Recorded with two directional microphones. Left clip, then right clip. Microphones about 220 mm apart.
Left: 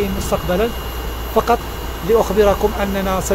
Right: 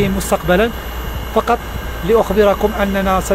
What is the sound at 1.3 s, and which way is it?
Speech, 5° right (ahead or behind).